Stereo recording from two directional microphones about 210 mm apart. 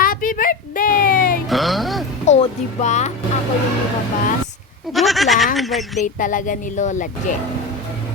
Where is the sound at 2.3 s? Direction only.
35° left (ahead or behind).